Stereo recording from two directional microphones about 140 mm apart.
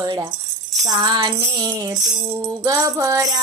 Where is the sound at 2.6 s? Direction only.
25° right (ahead or behind).